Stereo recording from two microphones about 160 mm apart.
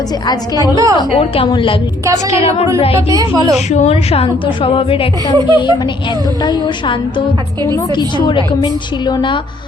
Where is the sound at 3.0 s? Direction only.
25° right (ahead or behind).